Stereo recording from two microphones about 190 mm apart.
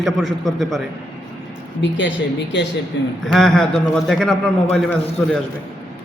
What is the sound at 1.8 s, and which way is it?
Speech, 70° left (ahead or behind).